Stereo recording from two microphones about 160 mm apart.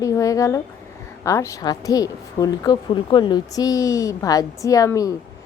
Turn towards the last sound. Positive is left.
turn(degrees=20)  # may be behind; listen again after turning